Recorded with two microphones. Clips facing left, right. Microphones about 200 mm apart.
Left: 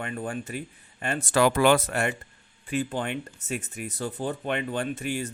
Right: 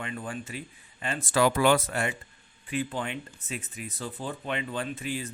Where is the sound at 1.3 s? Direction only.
65° left (ahead or behind).